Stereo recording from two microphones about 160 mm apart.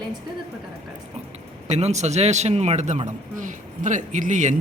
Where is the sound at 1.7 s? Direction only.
45° right (ahead or behind).